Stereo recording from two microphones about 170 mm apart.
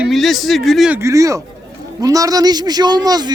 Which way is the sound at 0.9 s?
20° right (ahead or behind).